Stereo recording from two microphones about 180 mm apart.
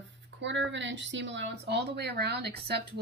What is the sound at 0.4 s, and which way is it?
A woman's voice, 85° right.